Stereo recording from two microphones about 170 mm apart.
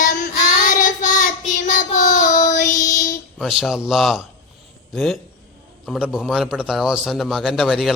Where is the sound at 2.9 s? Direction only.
50° left (ahead or behind).